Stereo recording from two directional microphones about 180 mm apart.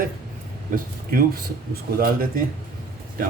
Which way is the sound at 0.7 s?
55° right (ahead or behind).